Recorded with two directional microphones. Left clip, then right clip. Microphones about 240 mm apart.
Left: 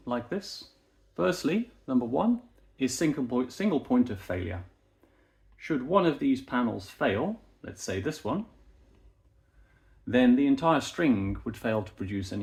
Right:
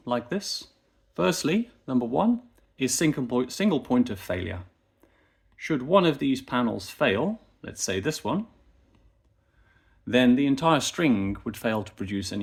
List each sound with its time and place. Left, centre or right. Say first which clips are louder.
0.0 s speech: right 4 dB; right
10.1 s speech: right 2 dB; right